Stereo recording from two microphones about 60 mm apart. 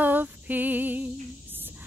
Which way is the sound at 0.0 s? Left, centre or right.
Right.